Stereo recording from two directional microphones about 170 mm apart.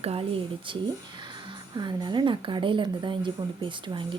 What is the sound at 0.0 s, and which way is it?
Speech, 35° right (ahead or behind).